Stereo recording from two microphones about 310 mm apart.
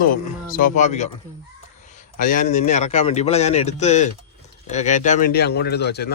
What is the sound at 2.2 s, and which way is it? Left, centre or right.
A man's voice, left.